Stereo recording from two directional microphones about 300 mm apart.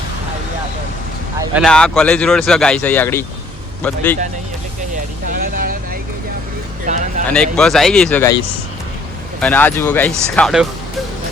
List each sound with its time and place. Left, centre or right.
1.4 s speech: centre
5.3 s vehicle: right
6.8 s a sound: right
7.3 s speech: centre
9.4 s speech: centre